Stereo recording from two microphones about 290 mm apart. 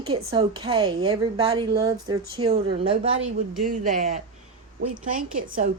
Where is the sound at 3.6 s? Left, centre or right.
Right.